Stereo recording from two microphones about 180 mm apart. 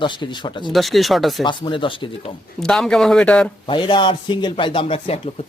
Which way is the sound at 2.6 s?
5° left (ahead or behind).